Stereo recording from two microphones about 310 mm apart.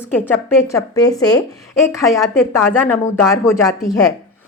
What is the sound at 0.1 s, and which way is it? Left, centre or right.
Speech, centre.